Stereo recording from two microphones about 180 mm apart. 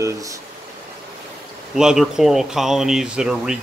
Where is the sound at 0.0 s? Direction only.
20° right (ahead or behind).